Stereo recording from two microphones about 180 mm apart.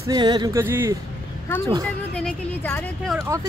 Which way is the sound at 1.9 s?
5° left (ahead or behind).